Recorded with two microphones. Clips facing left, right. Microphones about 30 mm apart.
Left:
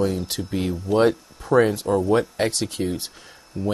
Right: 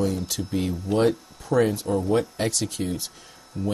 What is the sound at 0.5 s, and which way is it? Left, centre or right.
Speech, centre.